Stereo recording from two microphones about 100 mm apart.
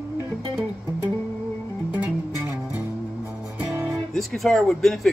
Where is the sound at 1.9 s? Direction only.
20° right (ahead or behind).